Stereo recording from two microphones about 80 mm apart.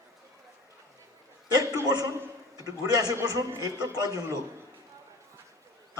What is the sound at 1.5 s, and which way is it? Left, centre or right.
A man's voice, right.